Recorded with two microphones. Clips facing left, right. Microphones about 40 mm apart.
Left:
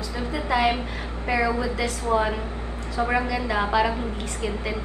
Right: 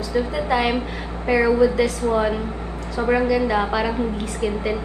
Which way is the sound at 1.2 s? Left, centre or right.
Centre.